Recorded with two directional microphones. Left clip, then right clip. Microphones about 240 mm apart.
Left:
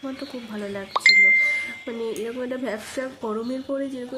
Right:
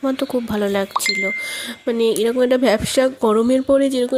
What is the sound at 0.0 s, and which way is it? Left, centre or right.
Speech, right.